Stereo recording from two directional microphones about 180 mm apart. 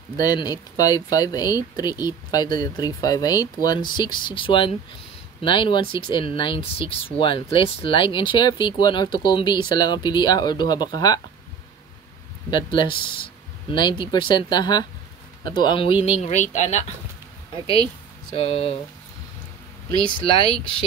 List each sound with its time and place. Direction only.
0.2 s speech: 20° left (ahead or behind)
12.4 s speech: 25° left (ahead or behind); by 16.8 s 40° left (ahead or behind)
18.3 s speech: 35° left (ahead or behind)
20.2 s speech: 30° left (ahead or behind)